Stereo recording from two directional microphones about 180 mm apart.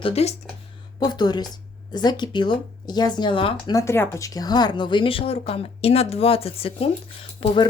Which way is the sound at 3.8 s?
15° left (ahead or behind).